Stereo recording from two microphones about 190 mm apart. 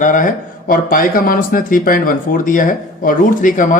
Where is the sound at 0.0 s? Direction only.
45° left (ahead or behind).